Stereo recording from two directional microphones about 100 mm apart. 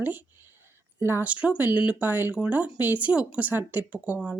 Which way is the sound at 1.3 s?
10° right (ahead or behind).